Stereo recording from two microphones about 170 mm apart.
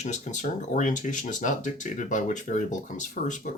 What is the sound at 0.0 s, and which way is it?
Speech, 45° left (ahead or behind).